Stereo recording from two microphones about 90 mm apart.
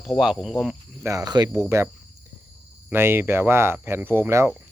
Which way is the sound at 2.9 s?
25° right (ahead or behind).